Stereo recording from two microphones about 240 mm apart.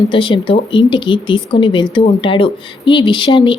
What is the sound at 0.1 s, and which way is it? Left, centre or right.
A woman's voice, left.